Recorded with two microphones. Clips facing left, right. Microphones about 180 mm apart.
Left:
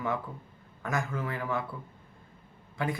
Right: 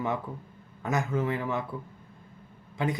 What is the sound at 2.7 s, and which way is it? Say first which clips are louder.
Speech: right 3 dB; 20° right (ahead or behind).